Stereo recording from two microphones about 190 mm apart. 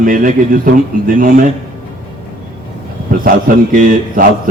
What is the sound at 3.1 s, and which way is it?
A man's voice, 45° right (ahead or behind).